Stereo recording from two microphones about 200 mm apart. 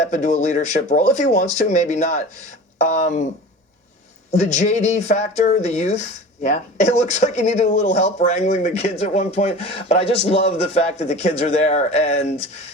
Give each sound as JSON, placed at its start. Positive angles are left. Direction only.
{"t": 0.1, "sound": "speech", "side_deg": 35}
{"t": 4.3, "sound": "speech", "side_deg": 35}